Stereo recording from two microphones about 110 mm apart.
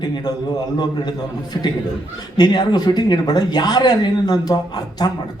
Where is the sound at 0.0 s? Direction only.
40° left (ahead or behind).